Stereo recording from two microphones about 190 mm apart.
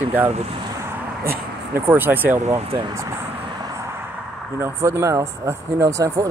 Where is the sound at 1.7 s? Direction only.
10° right (ahead or behind).